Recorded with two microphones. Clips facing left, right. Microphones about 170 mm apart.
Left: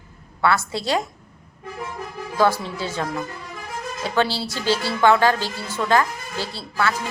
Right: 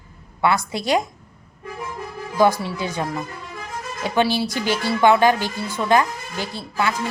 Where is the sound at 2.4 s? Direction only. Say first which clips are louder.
Right 2 dB; 15° right (ahead or behind).